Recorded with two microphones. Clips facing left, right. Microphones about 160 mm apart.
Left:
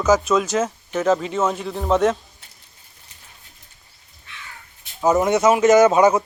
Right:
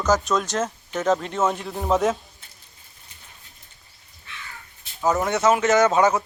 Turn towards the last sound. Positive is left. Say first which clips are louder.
# left 5 dB
turn(degrees=20)  # may be behind; listen again after turning